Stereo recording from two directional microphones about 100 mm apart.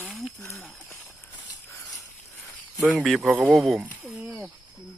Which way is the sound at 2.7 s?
15° right (ahead or behind).